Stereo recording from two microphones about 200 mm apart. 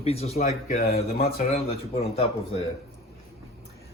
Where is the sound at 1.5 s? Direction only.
30° left (ahead or behind).